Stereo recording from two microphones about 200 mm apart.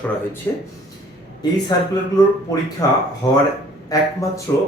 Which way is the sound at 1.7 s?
20° left (ahead or behind).